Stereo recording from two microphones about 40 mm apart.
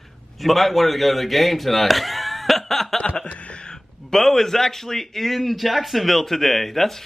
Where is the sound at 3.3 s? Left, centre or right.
Left.